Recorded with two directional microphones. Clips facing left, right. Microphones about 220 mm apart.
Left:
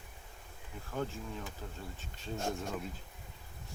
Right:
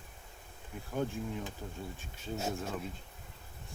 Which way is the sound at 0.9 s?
15° right (ahead or behind).